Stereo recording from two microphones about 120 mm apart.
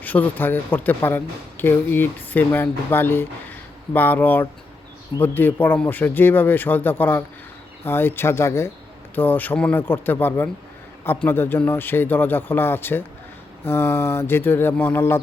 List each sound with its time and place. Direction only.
0.0 s speech: 15° left (ahead or behind)
7.9 s mantra: 20° left (ahead or behind)
9.1 s speech: 15° left (ahead or behind)
13.7 s mantra: 20° left (ahead or behind)